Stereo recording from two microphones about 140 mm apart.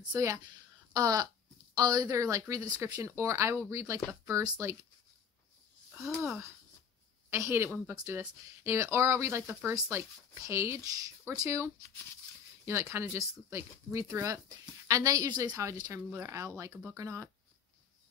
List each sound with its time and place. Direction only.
0.1 s speech: 20° right (ahead or behind)
6.0 s speech: centre (ahead or behind)
7.2 s speech: 20° right (ahead or behind)